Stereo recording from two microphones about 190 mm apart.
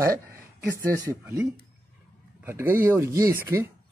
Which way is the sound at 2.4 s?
10° right (ahead or behind).